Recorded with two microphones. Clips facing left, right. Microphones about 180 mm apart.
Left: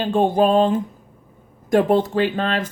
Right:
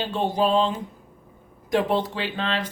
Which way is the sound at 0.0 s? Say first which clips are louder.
Left 6 dB; 50° left (ahead or behind).